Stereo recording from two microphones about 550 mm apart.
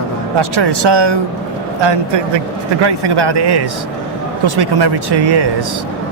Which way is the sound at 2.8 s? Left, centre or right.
Right.